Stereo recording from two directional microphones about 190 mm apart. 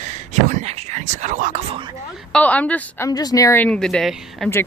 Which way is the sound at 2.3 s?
5° left (ahead or behind).